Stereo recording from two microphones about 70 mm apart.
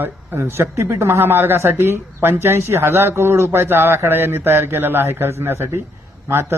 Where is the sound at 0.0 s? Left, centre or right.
Right.